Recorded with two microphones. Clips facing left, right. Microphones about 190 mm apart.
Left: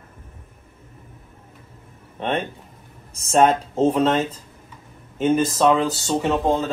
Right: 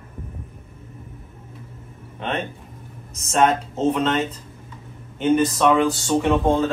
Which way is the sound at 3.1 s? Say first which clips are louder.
Left 2 dB; 30° left (ahead or behind).